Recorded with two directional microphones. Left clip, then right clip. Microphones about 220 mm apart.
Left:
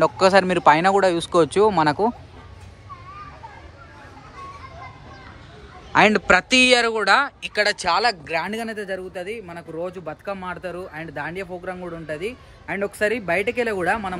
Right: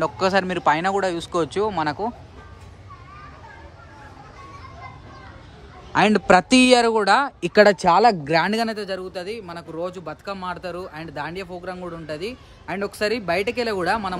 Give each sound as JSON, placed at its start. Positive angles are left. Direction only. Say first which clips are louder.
{"t": 0.0, "sound": "speech", "louder": "left 5 dB", "side_deg": -10}
{"t": 5.9, "sound": "speech", "louder": "even", "side_deg": -15}
{"t": 7.5, "sound": "speech", "louder": "right 6 dB", "side_deg": -30}
{"t": 8.3, "sound": "speech", "louder": "right 5 dB", "side_deg": -45}
{"t": 8.7, "sound": "speech", "louder": "even", "side_deg": -15}